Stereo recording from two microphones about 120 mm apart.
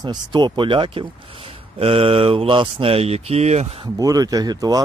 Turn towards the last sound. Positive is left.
turn(degrees=-30)  # may be behind; listen again after turning